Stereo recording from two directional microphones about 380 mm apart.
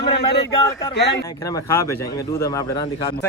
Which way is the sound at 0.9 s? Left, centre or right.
Left.